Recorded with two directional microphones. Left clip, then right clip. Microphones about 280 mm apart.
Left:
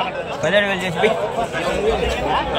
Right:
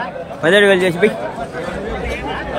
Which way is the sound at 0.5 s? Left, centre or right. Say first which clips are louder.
Right 7 dB; right.